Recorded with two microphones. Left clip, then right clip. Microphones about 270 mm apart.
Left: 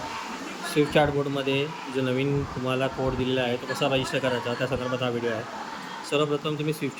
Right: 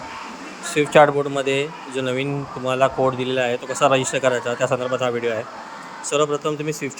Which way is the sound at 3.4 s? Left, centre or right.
Right.